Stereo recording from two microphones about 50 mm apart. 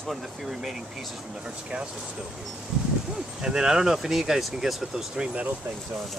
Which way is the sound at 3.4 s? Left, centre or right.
Centre.